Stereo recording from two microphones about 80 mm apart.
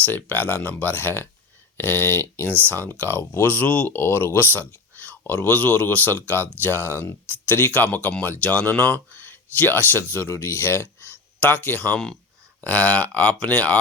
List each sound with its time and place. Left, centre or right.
0.0 s speech: left